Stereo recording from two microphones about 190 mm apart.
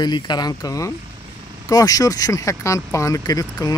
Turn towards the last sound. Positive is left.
turn(degrees=20)  # may be behind; listen again after turning